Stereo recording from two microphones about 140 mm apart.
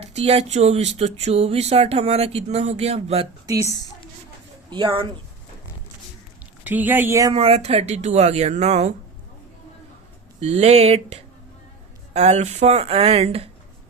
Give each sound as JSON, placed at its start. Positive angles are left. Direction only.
{"t": 0.0, "sound": "speech", "side_deg": -50}
{"t": 3.6, "sound": "a woman's voice", "side_deg": -25}
{"t": 4.7, "sound": "speech", "side_deg": -35}
{"t": 6.7, "sound": "speech", "side_deg": -15}
{"t": 7.3, "sound": "speech", "side_deg": -45}
{"t": 10.4, "sound": "speech", "side_deg": -50}